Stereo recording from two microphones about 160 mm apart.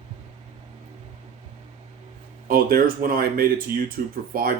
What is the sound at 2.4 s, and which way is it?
Speech, 65° right (ahead or behind).